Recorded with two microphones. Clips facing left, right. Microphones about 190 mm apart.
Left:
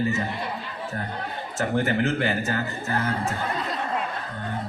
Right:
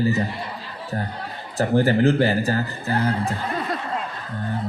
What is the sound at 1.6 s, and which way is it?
Speech, 35° right (ahead or behind).